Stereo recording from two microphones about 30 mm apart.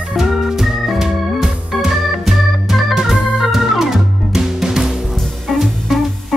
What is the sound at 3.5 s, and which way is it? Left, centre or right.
Music, centre.